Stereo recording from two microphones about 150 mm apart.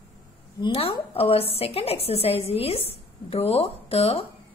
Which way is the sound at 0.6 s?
35° left (ahead or behind).